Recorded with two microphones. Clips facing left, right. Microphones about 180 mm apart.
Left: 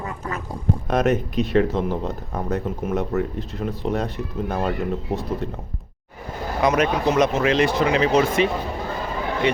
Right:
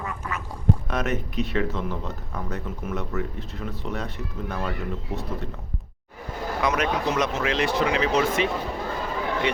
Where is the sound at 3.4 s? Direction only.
35° left (ahead or behind).